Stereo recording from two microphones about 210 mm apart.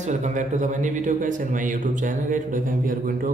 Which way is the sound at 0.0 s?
35° right (ahead or behind).